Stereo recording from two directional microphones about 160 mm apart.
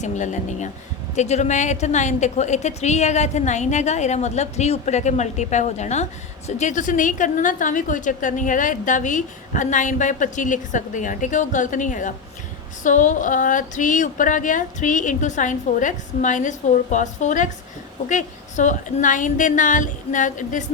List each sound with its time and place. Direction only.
0.0 s a woman's voice: 50° left (ahead or behind)